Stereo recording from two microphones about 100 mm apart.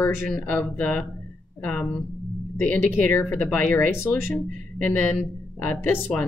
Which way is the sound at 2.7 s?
15° left (ahead or behind).